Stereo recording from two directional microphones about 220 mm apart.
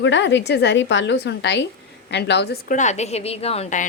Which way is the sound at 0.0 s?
55° left (ahead or behind).